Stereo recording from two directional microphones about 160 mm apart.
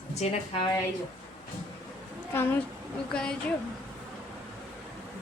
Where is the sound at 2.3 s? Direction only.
15° left (ahead or behind).